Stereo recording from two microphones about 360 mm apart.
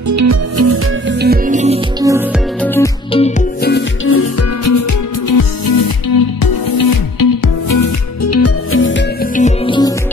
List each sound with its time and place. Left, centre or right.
0.1 s music: right
1.2 s music: right
2.6 s music: centre; by 4.7 s left
5.4 s music: left; by 9.9 s centre